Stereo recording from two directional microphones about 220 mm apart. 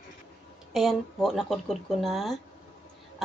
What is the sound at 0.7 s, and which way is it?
A woman's voice, centre (ahead or behind).